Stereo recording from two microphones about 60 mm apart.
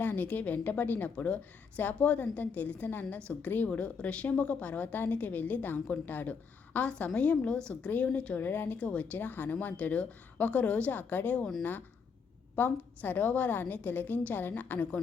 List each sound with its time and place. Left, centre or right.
0.0 s a woman's voice: left
8.4 s a woman's voice: left
12.6 s a woman's voice: left